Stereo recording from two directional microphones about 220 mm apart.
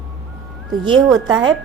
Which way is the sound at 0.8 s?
20° right (ahead or behind).